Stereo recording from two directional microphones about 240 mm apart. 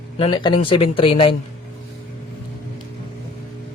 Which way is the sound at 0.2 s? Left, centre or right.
Centre.